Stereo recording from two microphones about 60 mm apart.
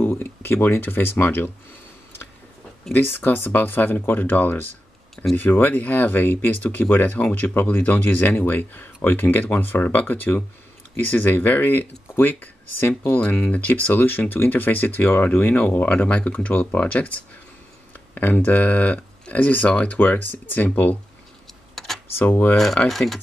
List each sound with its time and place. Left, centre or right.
0.0 s speech: left
2.9 s speech: left
21.7 s computer keyboard: centre
22.2 s speech: left
22.8 s speech: centre